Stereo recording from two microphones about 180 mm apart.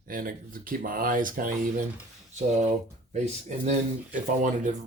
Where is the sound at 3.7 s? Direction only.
45° right (ahead or behind).